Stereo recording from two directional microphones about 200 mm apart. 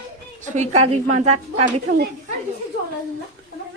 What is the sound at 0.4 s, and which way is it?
Speech, 35° right (ahead or behind).